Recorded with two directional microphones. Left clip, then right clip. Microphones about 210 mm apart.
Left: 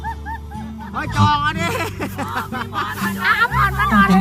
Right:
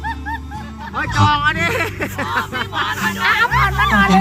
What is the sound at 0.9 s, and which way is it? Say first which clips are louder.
Speech: right 2 dB; 30° left (ahead or behind).